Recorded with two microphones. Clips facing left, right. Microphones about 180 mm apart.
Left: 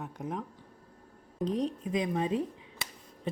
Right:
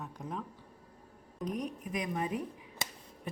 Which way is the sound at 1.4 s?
30° left (ahead or behind).